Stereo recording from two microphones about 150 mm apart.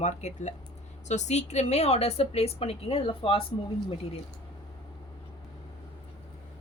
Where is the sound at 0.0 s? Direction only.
50° left (ahead or behind).